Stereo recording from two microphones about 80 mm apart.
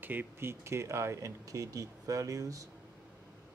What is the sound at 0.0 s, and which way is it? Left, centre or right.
Speech, right.